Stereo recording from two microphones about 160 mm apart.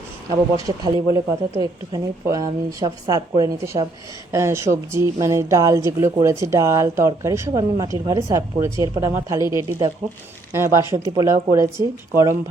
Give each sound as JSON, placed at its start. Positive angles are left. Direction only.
{"t": 0.5, "sound": "speech", "side_deg": -25}